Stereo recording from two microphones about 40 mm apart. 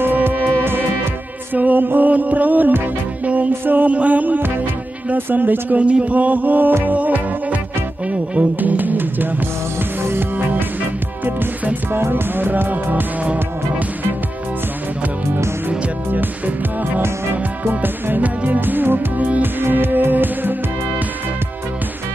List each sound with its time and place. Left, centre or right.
0.0 s music: right
5.1 s speech: right
5.8 s music: right
8.1 s speech: right
11.9 s music: right
16.1 s music: right
17.6 s music: right
18.2 s music: right
19.1 s music: right
19.4 s music: right